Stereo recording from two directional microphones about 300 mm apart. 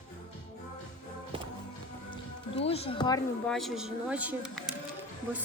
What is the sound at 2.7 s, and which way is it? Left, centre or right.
Speech, centre.